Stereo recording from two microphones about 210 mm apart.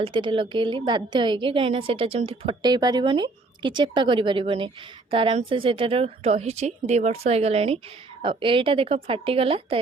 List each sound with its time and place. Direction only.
0.0 s a woman's voice: 25° right (ahead or behind)